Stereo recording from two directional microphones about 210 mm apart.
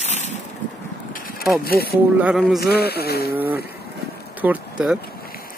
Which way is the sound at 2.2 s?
5° right (ahead or behind).